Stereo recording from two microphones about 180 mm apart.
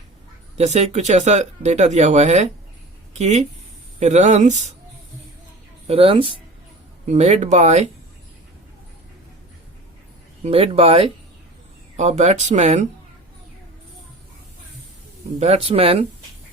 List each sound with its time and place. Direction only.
0.5 s speech: 35° right (ahead or behind)
5.9 s speech: 30° right (ahead or behind)
10.4 s speech: 35° right (ahead or behind)
15.4 s speech: 35° right (ahead or behind)